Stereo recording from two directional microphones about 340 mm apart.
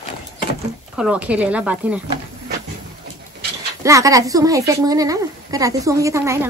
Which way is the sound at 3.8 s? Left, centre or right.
Centre.